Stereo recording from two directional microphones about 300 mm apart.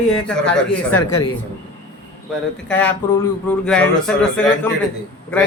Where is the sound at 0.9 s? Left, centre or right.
Left.